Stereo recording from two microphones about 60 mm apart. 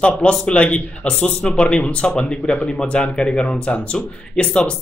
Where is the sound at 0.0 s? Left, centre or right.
Centre.